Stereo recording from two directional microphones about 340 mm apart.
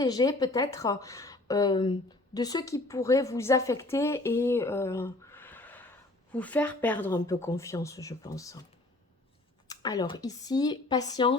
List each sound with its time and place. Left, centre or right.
0.0 s a woman's voice: centre
9.6 s a woman's voice: centre